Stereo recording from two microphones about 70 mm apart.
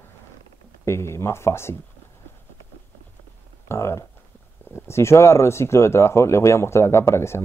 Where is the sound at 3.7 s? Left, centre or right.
Left.